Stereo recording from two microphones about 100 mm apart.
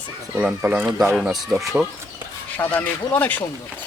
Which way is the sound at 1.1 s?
5° right (ahead or behind).